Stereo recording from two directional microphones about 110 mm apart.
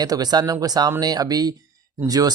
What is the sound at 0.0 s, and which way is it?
Speech, 35° right (ahead or behind).